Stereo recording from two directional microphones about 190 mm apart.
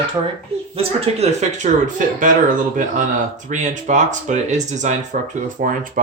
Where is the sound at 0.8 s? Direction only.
35° right (ahead or behind).